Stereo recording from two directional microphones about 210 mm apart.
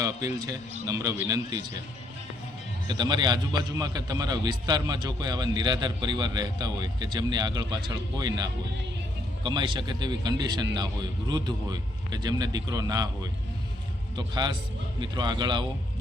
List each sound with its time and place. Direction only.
0.3 s a man's voice: 20° right (ahead or behind)
2.8 s a man's voice: 20° right (ahead or behind)